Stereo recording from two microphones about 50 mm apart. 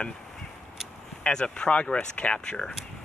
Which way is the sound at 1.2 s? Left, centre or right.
Centre.